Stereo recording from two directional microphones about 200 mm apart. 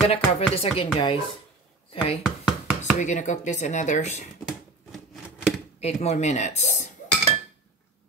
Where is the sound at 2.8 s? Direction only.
35° left (ahead or behind).